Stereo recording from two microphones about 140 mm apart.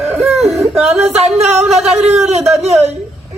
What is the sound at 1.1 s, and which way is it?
Music, 50° right (ahead or behind).